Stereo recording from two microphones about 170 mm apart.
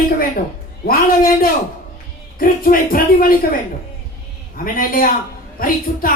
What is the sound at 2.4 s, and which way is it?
Speech, 55° left (ahead or behind).